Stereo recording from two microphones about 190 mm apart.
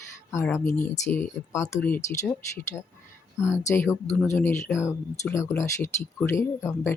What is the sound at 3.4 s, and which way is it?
Speech, 15° left (ahead or behind).